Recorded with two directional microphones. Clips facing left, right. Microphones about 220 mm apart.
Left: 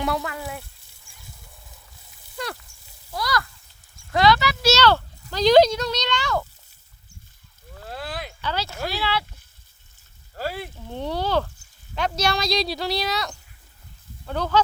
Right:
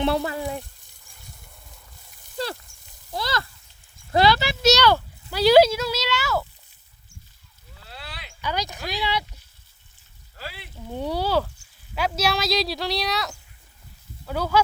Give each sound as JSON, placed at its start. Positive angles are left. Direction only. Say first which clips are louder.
{"t": 0.0, "sound": "speech", "louder": "right 4 dB", "side_deg": -30}
{"t": 3.1, "sound": "a sound", "louder": "left 1 dB", "side_deg": -25}
{"t": 4.1, "sound": "clip-clop", "louder": "even", "side_deg": -30}
{"t": 4.7, "sound": "speech", "louder": "even", "side_deg": -10}
{"t": 7.8, "sound": "rowboat", "louder": "left 9 dB", "side_deg": 45}
{"t": 8.4, "sound": "speech", "louder": "right 1 dB", "side_deg": -15}
{"t": 10.3, "sound": "speech", "louder": "left 10 dB", "side_deg": 45}
{"t": 10.8, "sound": "speech", "louder": "right 6 dB", "side_deg": -10}